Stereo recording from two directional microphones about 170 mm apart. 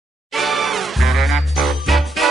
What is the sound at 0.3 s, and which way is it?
Music, centre (ahead or behind).